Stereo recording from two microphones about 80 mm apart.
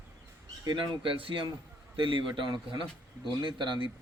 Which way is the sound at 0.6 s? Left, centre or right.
Right.